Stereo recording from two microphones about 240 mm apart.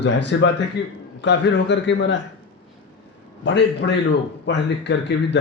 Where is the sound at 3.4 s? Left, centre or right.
Left.